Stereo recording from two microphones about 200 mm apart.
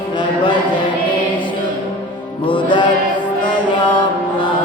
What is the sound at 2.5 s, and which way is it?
Music, 25° left (ahead or behind).